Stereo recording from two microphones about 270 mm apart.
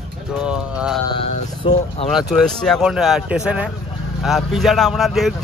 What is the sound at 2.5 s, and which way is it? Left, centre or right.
Speech, centre.